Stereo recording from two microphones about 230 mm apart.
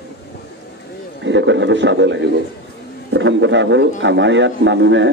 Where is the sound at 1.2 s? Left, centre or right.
Right.